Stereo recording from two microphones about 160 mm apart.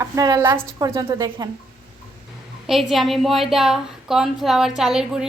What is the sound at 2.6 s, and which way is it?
A woman's voice, centre (ahead or behind).